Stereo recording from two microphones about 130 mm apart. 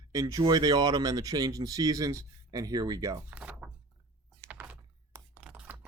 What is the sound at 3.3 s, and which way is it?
Speech, 10° right (ahead or behind).